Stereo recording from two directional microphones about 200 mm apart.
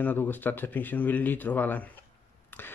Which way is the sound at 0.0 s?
10° left (ahead or behind).